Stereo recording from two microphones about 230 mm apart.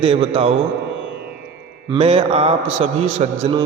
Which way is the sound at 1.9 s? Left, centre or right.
Right.